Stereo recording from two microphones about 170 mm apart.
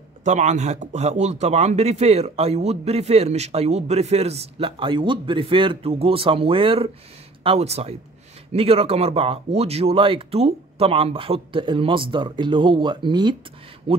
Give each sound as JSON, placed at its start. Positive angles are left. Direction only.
{"t": 0.2, "sound": "speech", "side_deg": -45}